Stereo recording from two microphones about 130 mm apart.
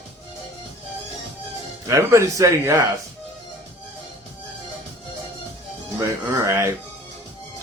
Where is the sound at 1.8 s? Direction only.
20° right (ahead or behind).